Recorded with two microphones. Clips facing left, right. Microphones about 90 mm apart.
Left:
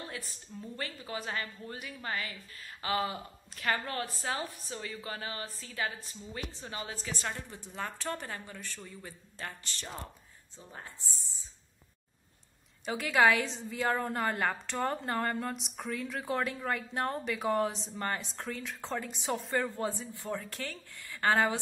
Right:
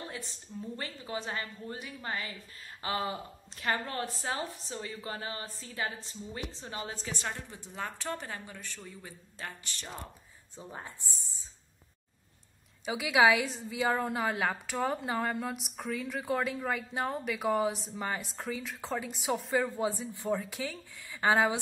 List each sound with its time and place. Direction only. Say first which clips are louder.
0.7 s a woman's voice: left 1 dB; 20° right (ahead or behind)
7.2 s a woman's voice: even; 15° right (ahead or behind)
12.8 s a woman's voice: right 1 dB; 10° right (ahead or behind)
20.1 s a woman's voice: right 5 dB; 20° right (ahead or behind)